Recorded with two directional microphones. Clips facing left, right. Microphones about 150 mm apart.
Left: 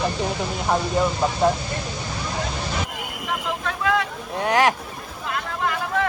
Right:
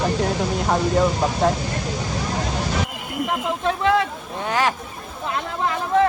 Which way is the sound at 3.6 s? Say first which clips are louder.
Right 5 dB; 30° right (ahead or behind).